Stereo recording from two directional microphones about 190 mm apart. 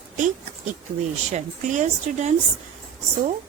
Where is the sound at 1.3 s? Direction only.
40° right (ahead or behind).